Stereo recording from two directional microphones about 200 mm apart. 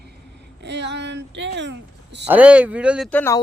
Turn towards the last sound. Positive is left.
turn(degrees=10)  # may be behind; listen again after turning